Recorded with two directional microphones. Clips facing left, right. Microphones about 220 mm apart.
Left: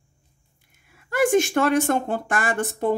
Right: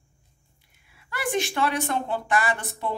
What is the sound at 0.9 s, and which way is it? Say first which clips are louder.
Speech: left 9 dB; 45° left (ahead or behind).